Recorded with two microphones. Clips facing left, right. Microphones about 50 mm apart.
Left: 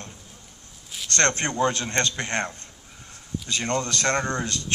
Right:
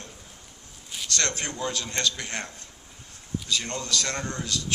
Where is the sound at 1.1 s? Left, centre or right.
Left.